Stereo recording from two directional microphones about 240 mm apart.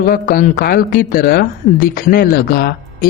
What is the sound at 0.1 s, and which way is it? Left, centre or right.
Speech, left.